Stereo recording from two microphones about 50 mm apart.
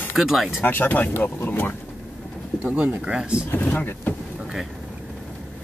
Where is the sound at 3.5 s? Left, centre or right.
Left.